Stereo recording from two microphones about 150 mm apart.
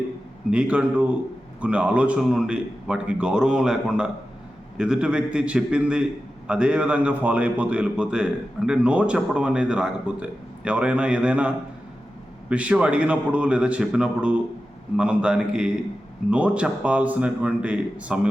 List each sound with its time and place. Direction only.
0.5 s a man's voice: 10° right (ahead or behind)